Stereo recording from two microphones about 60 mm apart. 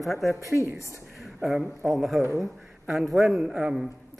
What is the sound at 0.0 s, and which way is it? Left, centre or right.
Speech, centre.